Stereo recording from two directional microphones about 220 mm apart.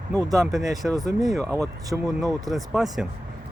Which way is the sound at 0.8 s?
5° right (ahead or behind).